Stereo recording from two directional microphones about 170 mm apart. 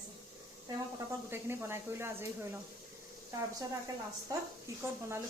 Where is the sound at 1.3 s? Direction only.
15° right (ahead or behind).